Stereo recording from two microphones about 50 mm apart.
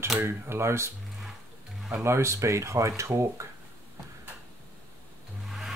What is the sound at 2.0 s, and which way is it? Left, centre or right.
Speech, right.